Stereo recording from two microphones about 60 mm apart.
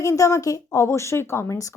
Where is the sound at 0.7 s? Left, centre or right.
Left.